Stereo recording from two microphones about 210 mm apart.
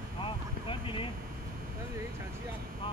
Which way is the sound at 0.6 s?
25° left (ahead or behind).